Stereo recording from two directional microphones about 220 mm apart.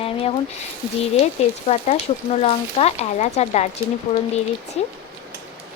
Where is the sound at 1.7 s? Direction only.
30° left (ahead or behind).